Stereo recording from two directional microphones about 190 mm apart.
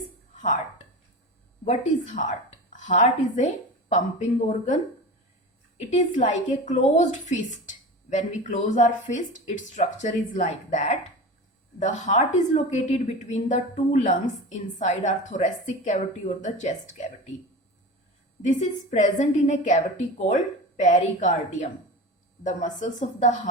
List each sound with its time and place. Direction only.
1.6 s a woman's voice: 40° left (ahead or behind)
5.9 s a woman's voice: 40° left (ahead or behind)
18.4 s a woman's voice: 40° left (ahead or behind)